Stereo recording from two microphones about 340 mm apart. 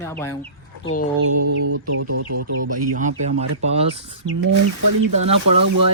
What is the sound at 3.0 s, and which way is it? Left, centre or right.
Speech, right.